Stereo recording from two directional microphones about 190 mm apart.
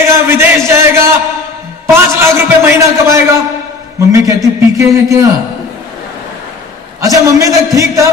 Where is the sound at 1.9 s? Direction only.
15° right (ahead or behind).